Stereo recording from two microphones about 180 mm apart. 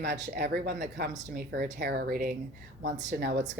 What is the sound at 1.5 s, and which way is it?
Speech, 60° right (ahead or behind).